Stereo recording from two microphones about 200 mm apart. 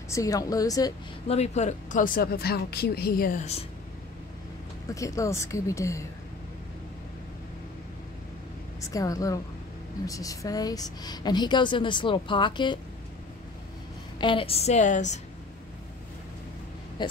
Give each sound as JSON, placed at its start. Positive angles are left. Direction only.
{"t": 0.1, "sound": "speech", "side_deg": 15}
{"t": 1.2, "sound": "speech", "side_deg": 30}
{"t": 4.9, "sound": "speech", "side_deg": 15}
{"t": 8.9, "sound": "a woman's voice", "side_deg": 15}
{"t": 14.1, "sound": "a woman's voice", "side_deg": 25}
{"t": 17.0, "sound": "a woman's voice", "side_deg": 25}